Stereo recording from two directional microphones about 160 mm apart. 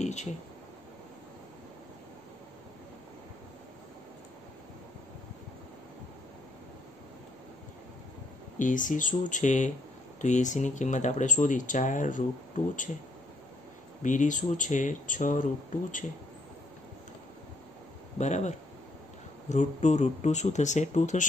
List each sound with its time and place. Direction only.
0.0 s a sound: 45° left (ahead or behind)
8.5 s speech: 55° left (ahead or behind)
14.0 s speech: 50° left (ahead or behind)
18.1 s speech: 45° left (ahead or behind)